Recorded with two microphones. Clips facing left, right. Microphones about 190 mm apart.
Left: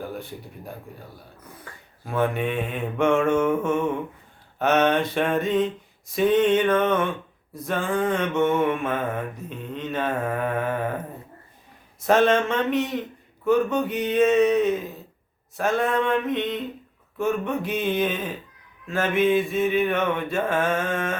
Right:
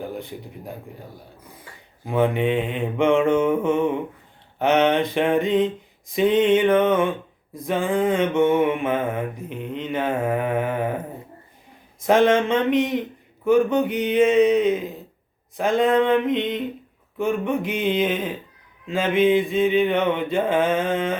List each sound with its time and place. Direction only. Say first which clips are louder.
0.0 s mantra: right 2 dB; 15° right (ahead or behind)
12.0 s mantra: right 2 dB; 15° right (ahead or behind)